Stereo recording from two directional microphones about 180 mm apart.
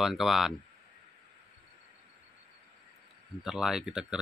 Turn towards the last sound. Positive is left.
turn(degrees=-5)  # may be behind; listen again after turning